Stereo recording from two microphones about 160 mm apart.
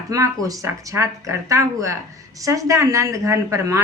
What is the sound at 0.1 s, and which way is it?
Speech, 20° right (ahead or behind).